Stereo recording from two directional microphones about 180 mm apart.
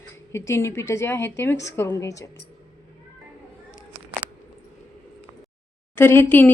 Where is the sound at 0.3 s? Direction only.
15° left (ahead or behind).